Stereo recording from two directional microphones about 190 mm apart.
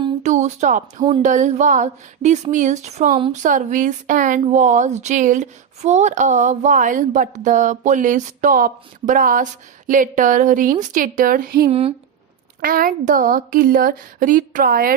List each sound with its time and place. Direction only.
0.2 s speech: 40° right (ahead or behind)
11.7 s speech: 30° right (ahead or behind)
12.6 s a woman's voice: 50° right (ahead or behind)